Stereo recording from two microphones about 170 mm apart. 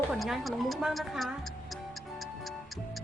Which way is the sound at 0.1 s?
Centre (ahead or behind).